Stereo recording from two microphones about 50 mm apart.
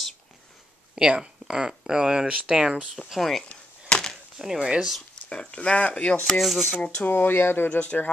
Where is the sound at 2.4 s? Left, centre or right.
Centre.